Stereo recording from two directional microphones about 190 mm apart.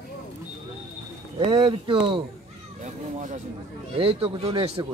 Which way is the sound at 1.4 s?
25° right (ahead or behind).